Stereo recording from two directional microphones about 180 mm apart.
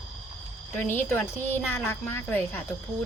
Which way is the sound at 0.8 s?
10° left (ahead or behind).